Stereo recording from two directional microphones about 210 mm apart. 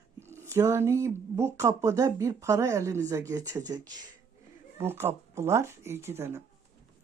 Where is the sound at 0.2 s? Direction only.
10° right (ahead or behind).